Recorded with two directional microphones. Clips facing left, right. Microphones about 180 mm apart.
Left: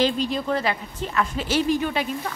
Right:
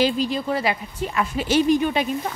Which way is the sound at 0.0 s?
5° right (ahead or behind).